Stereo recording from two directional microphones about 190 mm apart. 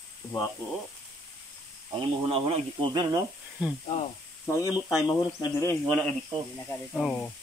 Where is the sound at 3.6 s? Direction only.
5° right (ahead or behind).